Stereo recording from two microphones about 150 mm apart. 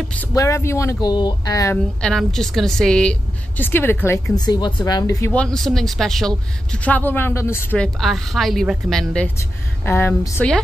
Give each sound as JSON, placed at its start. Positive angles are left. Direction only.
{"t": 0.3, "sound": "speech", "side_deg": 20}
{"t": 2.0, "sound": "a woman's voice", "side_deg": 5}
{"t": 4.4, "sound": "speech", "side_deg": 30}
{"t": 5.3, "sound": "a woman's voice", "side_deg": 5}
{"t": 9.4, "sound": "a woman's voice", "side_deg": 15}